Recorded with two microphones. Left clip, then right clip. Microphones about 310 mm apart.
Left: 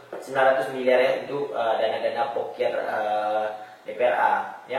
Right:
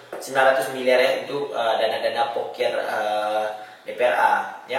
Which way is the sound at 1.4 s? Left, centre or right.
Left.